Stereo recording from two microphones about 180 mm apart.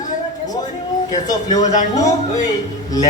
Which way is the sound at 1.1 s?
20° left (ahead or behind).